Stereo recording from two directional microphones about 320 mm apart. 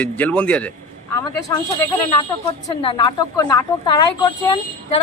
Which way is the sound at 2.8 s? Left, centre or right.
Centre.